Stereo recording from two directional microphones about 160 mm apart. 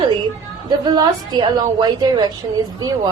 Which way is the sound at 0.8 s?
25° right (ahead or behind).